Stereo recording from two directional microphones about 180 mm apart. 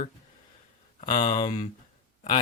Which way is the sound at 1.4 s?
35° left (ahead or behind).